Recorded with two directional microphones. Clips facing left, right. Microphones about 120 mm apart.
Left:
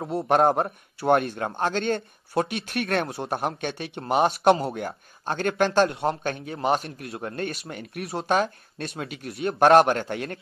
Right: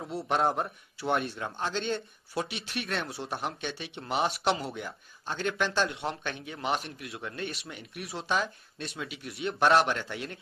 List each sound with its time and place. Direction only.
0.0 s a man's voice: 50° left (ahead or behind)